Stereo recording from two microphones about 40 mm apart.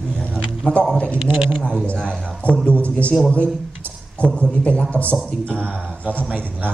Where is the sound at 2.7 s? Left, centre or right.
Left.